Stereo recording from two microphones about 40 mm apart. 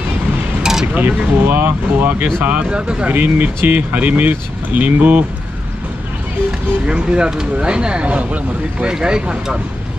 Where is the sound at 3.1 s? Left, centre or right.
Right.